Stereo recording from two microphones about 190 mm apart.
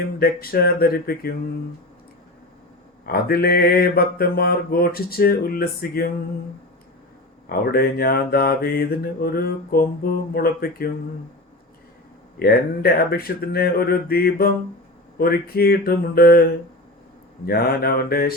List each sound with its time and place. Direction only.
0.2 s mantra: 50° left (ahead or behind)
3.1 s mantra: 50° left (ahead or behind)
7.5 s mantra: 55° left (ahead or behind)
12.4 s mantra: 55° left (ahead or behind)